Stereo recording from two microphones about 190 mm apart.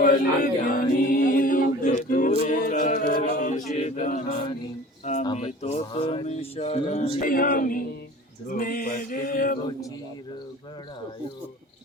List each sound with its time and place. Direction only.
0.0 s chant: 40° left (ahead or behind)
2.3 s a capella: 40° left (ahead or behind)
3.1 s chant: 40° left (ahead or behind)
5.2 s speech: 30° left (ahead or behind); by 7.9 s 45° left (ahead or behind)
8.4 s mantra: 50° left (ahead or behind)